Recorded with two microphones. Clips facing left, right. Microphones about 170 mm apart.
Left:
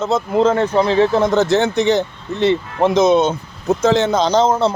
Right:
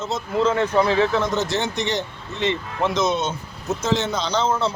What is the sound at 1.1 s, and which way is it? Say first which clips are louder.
Speech: left 7 dB; 55° left (ahead or behind).